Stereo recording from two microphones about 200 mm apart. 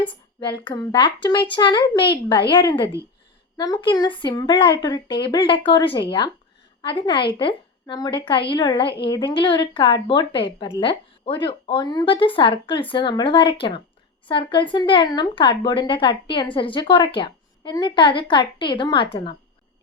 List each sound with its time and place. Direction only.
0.1 s speech: 25° left (ahead or behind)